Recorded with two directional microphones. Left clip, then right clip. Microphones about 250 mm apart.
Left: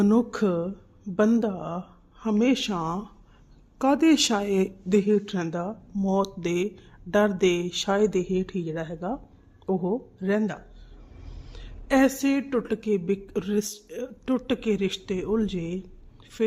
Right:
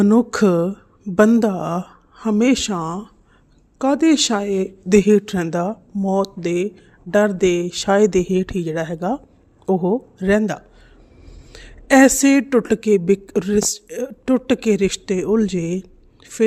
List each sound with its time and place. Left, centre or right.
0.0 s a woman's voice: centre
4.9 s a woman's voice: right